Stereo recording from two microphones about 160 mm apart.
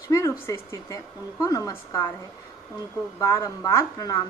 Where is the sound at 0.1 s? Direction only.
20° left (ahead or behind).